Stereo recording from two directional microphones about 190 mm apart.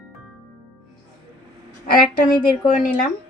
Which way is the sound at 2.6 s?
45° left (ahead or behind).